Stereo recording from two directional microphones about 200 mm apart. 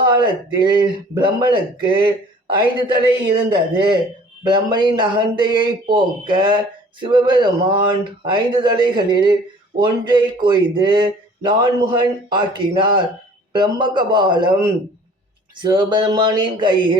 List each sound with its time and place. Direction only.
0.0 s speech: 20° right (ahead or behind)